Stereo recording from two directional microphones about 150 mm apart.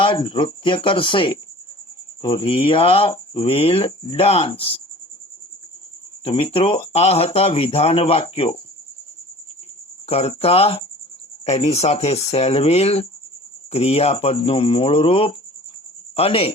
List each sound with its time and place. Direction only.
0.0 s speech: 35° left (ahead or behind)
6.2 s speech: 40° left (ahead or behind)
10.1 s speech: 40° left (ahead or behind)